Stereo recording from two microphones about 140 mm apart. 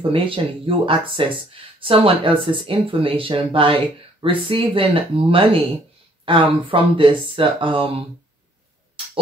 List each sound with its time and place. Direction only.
0.1 s speech: 40° right (ahead or behind)